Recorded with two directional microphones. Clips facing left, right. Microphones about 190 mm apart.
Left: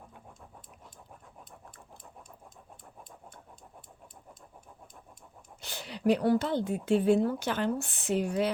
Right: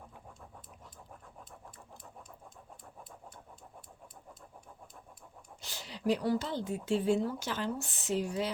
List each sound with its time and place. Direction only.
5.5 s speech: 60° left (ahead or behind)